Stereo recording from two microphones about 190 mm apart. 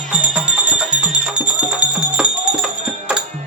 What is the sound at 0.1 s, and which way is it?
Music, 5° right (ahead or behind).